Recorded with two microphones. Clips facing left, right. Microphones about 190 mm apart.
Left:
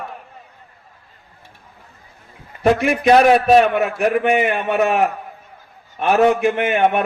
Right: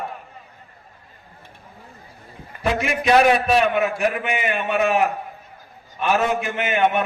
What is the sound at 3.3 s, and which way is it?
A man's voice, 45° left (ahead or behind).